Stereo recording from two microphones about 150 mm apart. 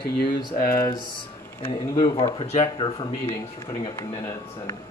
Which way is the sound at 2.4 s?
40° left (ahead or behind).